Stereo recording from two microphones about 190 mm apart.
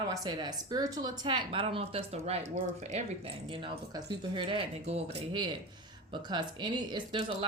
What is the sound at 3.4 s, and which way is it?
Speech, 25° right (ahead or behind).